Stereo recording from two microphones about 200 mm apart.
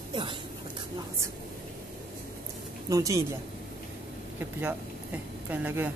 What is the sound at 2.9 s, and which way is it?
Speech, 15° right (ahead or behind).